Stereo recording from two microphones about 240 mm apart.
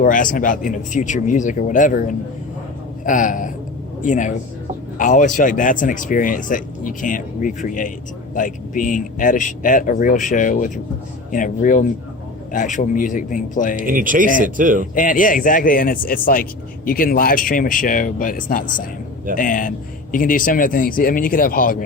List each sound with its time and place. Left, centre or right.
0.0 s a man's voice: left
13.8 s speech: right
14.9 s a man's voice: left